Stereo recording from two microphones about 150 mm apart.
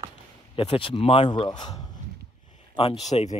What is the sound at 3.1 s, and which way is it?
Speech, 40° left (ahead or behind).